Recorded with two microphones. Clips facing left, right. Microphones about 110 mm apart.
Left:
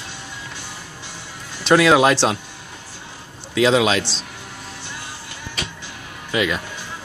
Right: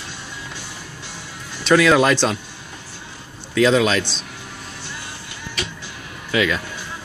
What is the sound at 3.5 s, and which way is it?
Speech, 20° left (ahead or behind).